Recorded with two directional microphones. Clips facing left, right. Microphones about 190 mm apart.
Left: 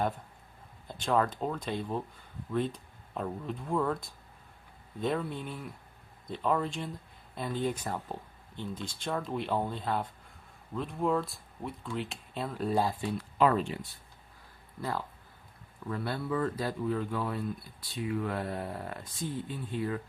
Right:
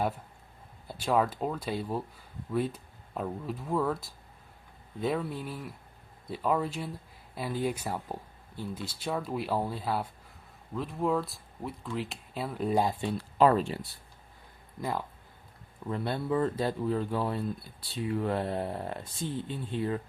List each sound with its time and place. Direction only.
0.9 s speech: 10° right (ahead or behind)
13.1 s speech: 35° right (ahead or behind)
14.8 s speech: 15° right (ahead or behind)